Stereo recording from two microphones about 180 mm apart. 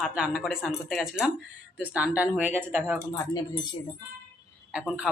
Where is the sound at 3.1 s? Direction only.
20° left (ahead or behind).